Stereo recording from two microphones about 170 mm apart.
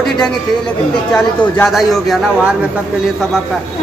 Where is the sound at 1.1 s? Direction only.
5° left (ahead or behind).